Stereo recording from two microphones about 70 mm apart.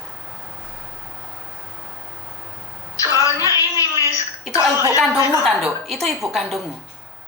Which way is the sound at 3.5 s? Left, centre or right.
Left.